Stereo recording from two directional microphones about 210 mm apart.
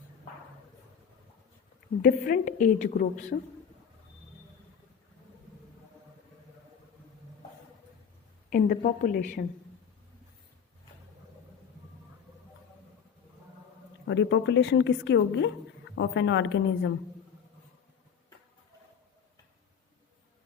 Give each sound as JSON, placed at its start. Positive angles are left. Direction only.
{"t": 2.0, "sound": "a woman's voice", "side_deg": 40}
{"t": 8.4, "sound": "a woman's voice", "side_deg": 40}
{"t": 14.1, "sound": "a woman's voice", "side_deg": 60}